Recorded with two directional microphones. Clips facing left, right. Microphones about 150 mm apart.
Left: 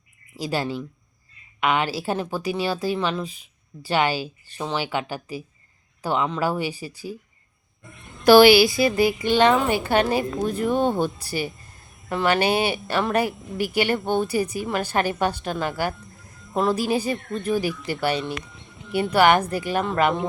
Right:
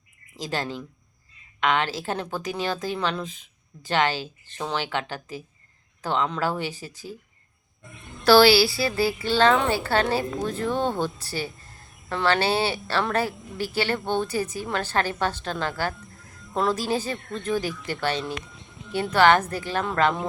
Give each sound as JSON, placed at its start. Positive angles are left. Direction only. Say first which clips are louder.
{"t": 0.3, "sound": "a woman's voice", "louder": "left 4 dB", "side_deg": 10}
{"t": 8.2, "sound": "a woman's voice", "louder": "left 4 dB", "side_deg": 15}